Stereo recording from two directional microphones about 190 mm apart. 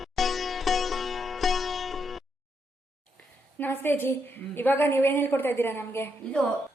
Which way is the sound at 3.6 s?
10° left (ahead or behind).